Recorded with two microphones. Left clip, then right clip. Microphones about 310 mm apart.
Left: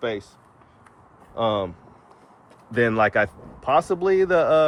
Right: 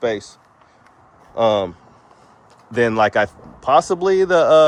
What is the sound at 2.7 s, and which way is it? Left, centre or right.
A man's voice, centre.